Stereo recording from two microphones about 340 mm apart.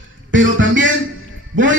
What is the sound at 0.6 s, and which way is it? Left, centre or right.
Speech, right.